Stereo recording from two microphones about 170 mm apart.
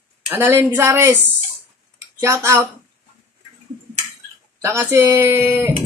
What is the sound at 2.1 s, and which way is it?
Speech, 15° right (ahead or behind).